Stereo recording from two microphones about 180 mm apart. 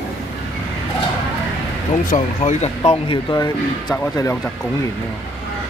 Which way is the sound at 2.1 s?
40° left (ahead or behind).